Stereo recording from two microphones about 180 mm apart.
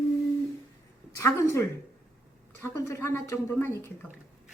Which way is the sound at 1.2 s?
15° left (ahead or behind).